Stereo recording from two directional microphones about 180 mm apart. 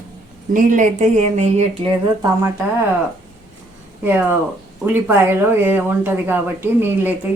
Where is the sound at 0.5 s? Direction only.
45° right (ahead or behind).